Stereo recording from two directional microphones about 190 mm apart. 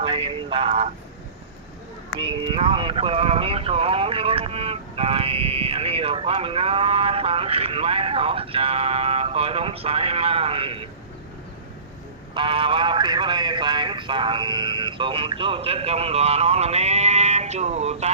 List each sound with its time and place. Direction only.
0.0 s a sound: 30° right (ahead or behind)
2.6 s speech: 25° right (ahead or behind)
12.3 s speech: 25° right (ahead or behind)